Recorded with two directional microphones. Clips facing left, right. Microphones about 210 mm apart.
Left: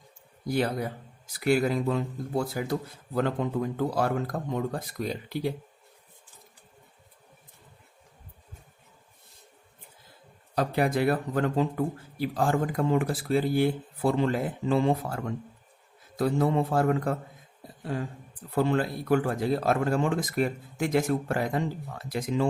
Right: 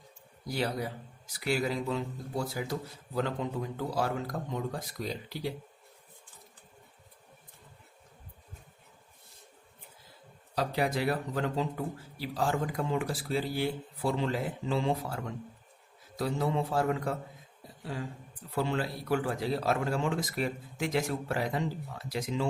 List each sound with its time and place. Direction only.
0.4 s speech: 50° left (ahead or behind)
10.5 s speech: 55° left (ahead or behind)